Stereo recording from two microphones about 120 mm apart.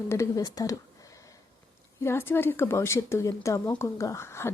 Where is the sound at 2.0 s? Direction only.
20° left (ahead or behind).